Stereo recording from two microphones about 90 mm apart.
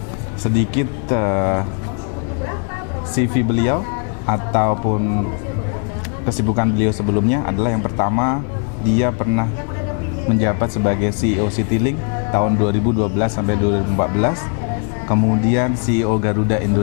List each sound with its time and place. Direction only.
0.8 s speech: 20° left (ahead or behind)
3.2 s speech: 15° left (ahead or behind)
6.2 s speech: 20° left (ahead or behind)